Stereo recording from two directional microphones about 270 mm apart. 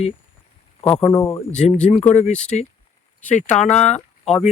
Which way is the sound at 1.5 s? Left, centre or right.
Left.